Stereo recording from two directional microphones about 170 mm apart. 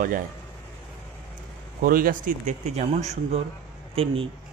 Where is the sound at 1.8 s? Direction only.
55° right (ahead or behind).